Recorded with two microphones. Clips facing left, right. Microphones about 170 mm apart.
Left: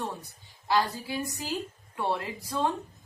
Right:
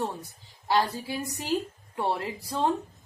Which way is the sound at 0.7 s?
30° right (ahead or behind).